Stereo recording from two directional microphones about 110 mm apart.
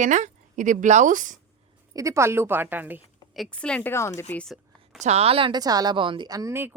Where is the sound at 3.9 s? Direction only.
25° left (ahead or behind).